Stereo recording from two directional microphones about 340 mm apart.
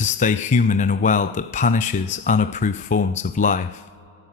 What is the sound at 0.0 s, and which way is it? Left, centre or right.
Speech, left.